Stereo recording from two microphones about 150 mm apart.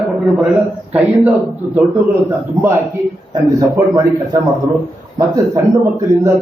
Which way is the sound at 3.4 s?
20° right (ahead or behind).